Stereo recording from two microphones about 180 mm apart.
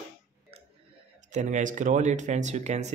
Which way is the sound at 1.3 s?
45° right (ahead or behind).